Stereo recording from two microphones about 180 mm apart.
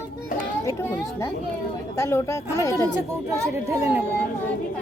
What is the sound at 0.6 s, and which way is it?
Speech, 15° left (ahead or behind).